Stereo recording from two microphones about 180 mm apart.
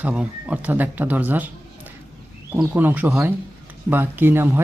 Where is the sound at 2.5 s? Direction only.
10° right (ahead or behind).